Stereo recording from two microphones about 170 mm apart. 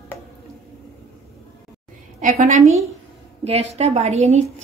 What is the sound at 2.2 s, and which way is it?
A woman's voice, 40° right (ahead or behind).